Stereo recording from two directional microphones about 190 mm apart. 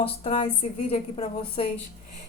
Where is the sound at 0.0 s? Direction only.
30° left (ahead or behind).